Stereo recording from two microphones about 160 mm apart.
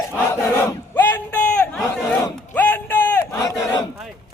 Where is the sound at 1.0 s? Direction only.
10° left (ahead or behind).